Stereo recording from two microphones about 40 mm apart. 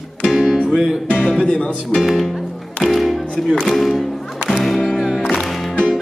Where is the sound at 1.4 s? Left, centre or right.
Centre.